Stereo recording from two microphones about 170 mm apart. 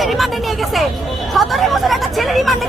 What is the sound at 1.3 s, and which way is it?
Speech, centre (ahead or behind).